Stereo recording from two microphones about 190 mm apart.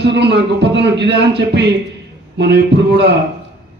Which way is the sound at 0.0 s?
60° right (ahead or behind).